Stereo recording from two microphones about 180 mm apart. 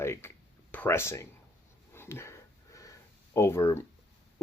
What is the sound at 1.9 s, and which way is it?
Sniff, 15° left (ahead or behind).